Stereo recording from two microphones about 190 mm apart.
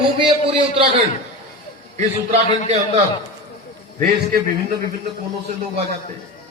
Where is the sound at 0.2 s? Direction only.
25° right (ahead or behind).